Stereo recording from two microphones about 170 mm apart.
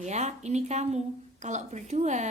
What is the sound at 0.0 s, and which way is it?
A woman's voice, 40° right (ahead or behind).